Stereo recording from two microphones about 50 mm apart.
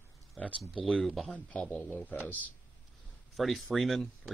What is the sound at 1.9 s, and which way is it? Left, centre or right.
Speech, left.